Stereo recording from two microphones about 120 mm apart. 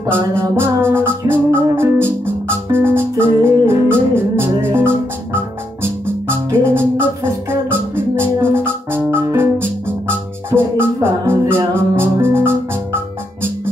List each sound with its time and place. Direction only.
0.0 s music: 20° right (ahead or behind)